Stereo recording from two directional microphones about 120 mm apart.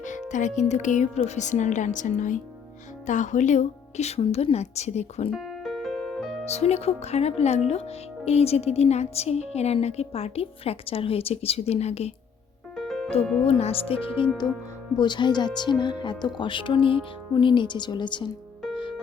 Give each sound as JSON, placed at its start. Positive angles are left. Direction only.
{"t": 0.3, "sound": "speech", "side_deg": 90}
{"t": 5.3, "sound": "piano", "side_deg": 0}
{"t": 6.4, "sound": "speech", "side_deg": 60}
{"t": 12.7, "sound": "music", "side_deg": 0}
{"t": 13.5, "sound": "speech", "side_deg": 55}
{"t": 14.9, "sound": "speech", "side_deg": 40}